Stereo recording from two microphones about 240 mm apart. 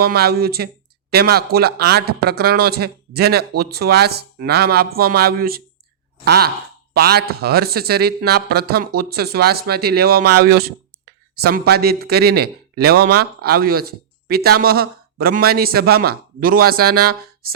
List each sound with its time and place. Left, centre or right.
0.0 s speech: right